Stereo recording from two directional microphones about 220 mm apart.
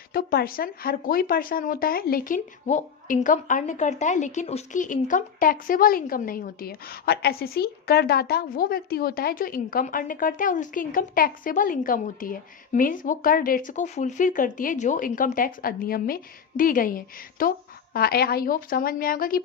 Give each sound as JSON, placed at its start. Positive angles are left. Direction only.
{"t": 0.1, "sound": "speech", "side_deg": 45}